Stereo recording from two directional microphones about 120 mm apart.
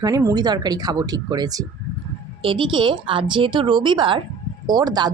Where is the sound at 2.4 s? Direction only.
45° right (ahead or behind).